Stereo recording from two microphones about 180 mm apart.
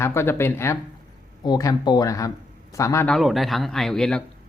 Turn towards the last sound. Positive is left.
turn(degrees=5)  # may be behind; listen again after turning